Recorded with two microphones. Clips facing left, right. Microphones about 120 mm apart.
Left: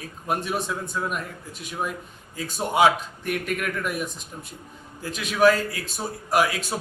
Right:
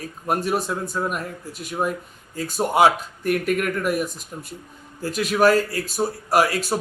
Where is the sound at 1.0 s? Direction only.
45° right (ahead or behind).